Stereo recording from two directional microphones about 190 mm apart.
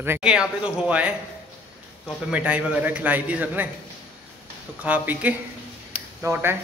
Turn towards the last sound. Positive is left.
turn(degrees=-10)  # may be behind; listen again after turning